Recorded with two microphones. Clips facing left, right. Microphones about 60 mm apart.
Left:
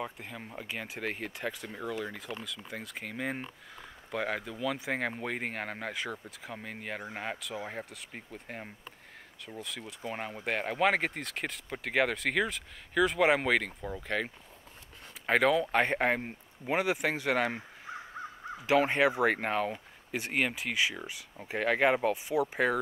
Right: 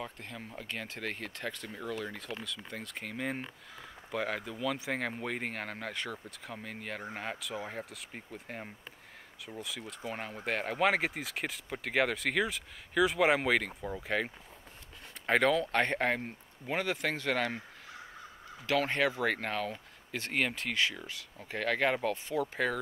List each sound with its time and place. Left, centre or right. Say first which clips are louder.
0.0 s speech: left 3 dB; centre